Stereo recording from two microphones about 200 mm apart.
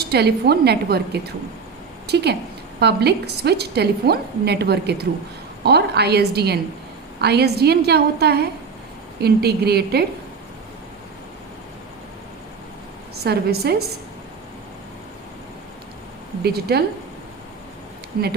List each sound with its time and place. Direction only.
0.0 s a woman's voice: 55° right (ahead or behind)
13.2 s a woman's voice: 55° right (ahead or behind)
16.4 s a woman's voice: 50° right (ahead or behind)